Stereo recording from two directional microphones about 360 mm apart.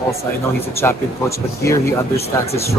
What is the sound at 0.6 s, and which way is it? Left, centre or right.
Speech, centre.